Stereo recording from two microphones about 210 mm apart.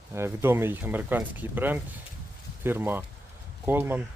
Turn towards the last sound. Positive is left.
turn(degrees=-10)  # may be behind; listen again after turning